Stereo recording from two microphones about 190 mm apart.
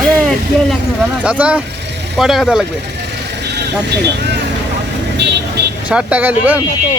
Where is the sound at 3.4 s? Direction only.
65° right (ahead or behind).